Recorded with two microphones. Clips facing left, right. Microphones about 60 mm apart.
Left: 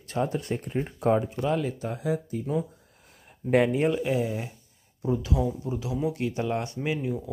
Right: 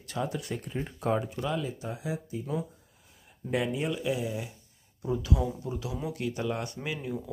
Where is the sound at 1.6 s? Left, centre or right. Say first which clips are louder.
Left 5 dB; left.